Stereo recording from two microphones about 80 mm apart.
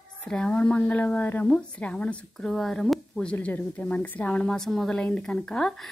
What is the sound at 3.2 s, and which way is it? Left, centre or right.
A woman's voice, centre.